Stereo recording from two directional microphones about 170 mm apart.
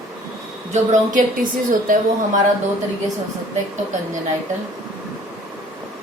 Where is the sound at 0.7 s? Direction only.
50° right (ahead or behind).